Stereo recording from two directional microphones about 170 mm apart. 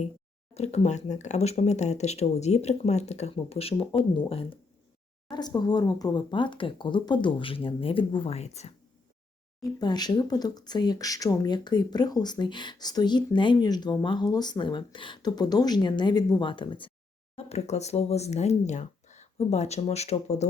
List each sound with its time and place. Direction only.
0.5 s speech: 40° left (ahead or behind)
9.7 s speech: 25° left (ahead or behind); by 20.5 s 40° left (ahead or behind)